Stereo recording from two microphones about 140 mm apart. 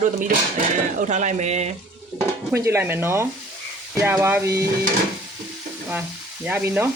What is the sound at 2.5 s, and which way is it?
Stir, 20° right (ahead or behind).